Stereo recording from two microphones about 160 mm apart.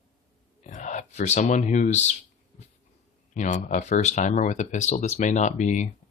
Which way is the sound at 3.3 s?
50° left (ahead or behind).